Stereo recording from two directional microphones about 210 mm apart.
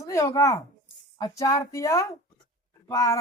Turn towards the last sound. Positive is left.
turn(degrees=15)  # may be behind; listen again after turning